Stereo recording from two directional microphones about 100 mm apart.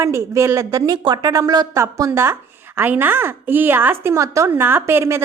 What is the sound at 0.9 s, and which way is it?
Speech, 50° right (ahead or behind).